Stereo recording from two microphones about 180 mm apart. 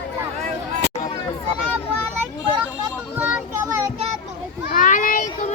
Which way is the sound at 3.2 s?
10° right (ahead or behind).